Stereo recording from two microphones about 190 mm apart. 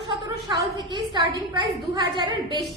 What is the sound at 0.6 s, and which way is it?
A woman's voice, 25° right (ahead or behind).